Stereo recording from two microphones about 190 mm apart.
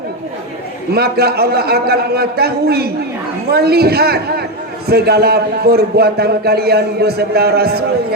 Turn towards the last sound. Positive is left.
turn(degrees=-55)  # may be behind; listen again after turning